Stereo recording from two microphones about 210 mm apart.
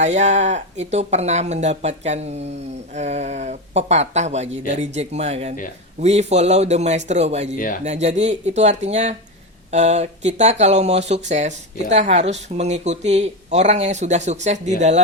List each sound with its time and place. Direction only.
0.0 s speech: 35° right (ahead or behind)
7.5 s speech: 40° left (ahead or behind)
7.9 s speech: 35° right (ahead or behind)